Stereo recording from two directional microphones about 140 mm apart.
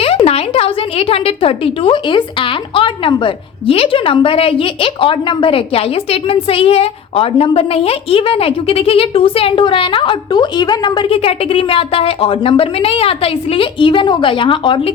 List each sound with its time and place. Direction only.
0.0 s a woman's voice: 45° left (ahead or behind)